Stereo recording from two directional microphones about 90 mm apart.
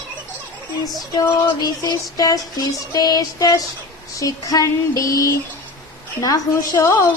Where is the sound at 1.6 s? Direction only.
50° left (ahead or behind).